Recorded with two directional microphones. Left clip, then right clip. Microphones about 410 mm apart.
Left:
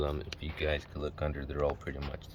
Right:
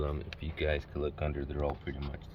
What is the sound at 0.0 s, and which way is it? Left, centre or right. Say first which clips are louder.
Speech: left 3 dB; centre.